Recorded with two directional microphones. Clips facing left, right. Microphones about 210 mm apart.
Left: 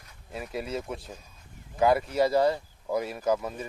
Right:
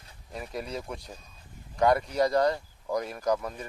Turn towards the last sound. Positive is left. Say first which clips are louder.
# left 1 dB
turn(degrees=5)  # may be behind; listen again after turning